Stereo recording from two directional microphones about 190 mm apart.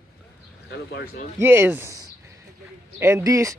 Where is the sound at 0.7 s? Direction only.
55° left (ahead or behind).